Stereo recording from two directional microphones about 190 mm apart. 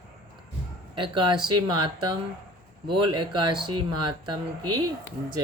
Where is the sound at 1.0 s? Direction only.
25° right (ahead or behind).